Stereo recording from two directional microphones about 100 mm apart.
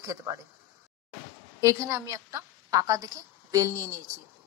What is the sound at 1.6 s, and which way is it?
A woman's voice, 30° right (ahead or behind).